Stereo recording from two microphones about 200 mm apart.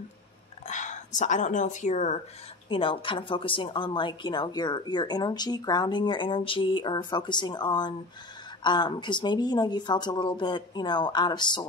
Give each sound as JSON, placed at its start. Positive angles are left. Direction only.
{"t": 0.7, "sound": "speech", "side_deg": 35}
{"t": 2.7, "sound": "a woman's voice", "side_deg": 25}